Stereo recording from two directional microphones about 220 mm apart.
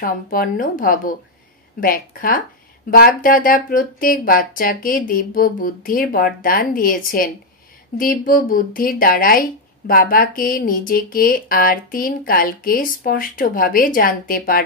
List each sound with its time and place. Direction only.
0.0 s a woman's voice: 40° left (ahead or behind)